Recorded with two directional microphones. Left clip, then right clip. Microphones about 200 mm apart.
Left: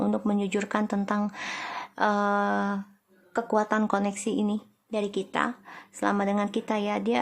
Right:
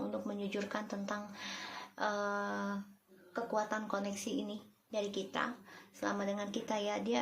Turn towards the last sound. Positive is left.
turn(degrees=35)  # may be behind; listen again after turning